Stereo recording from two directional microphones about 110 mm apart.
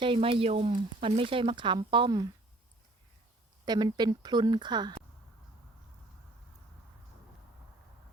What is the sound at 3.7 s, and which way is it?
Speech, 40° right (ahead or behind).